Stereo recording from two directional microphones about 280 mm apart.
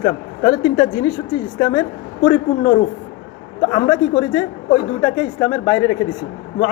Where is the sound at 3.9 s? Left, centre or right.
Centre.